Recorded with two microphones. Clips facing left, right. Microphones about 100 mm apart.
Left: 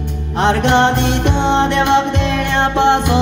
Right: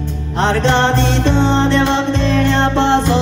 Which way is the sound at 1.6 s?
60° left (ahead or behind).